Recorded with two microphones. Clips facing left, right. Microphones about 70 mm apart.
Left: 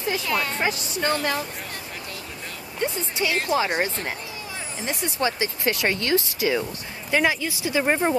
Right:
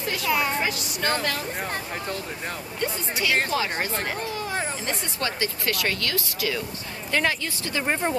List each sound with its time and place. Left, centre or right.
0.2 s a woman's voice: centre
0.6 s speech: left
2.8 s speech: left
7.1 s speech: centre